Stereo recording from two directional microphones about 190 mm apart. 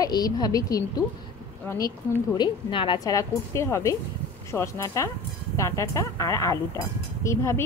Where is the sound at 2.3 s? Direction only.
25° left (ahead or behind).